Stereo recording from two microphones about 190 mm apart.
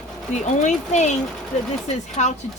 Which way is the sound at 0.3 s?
40° left (ahead or behind).